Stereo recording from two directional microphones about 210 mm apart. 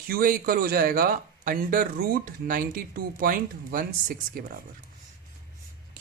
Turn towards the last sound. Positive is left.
turn(degrees=-40)  # may be behind; listen again after turning